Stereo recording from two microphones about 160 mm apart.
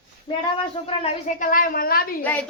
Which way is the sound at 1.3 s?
55° left (ahead or behind).